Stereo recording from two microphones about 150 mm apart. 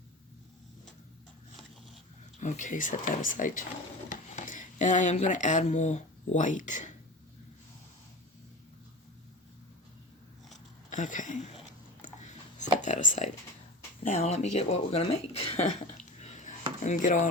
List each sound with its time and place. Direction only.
2.4 s speech: 55° left (ahead or behind)
10.8 s a sound: 55° left (ahead or behind)
12.8 s speech: 55° left (ahead or behind)